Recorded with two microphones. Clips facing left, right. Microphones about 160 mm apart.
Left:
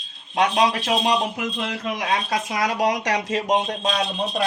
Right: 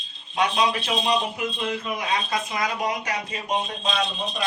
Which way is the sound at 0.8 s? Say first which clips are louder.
Left 3 dB; 60° left (ahead or behind).